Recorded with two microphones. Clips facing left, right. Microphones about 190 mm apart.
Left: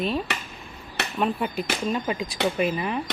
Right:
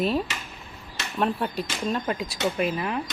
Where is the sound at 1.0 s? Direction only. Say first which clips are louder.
Left 6 dB; 65° left (ahead or behind).